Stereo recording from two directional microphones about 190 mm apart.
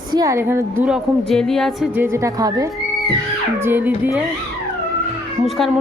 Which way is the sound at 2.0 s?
15° right (ahead or behind).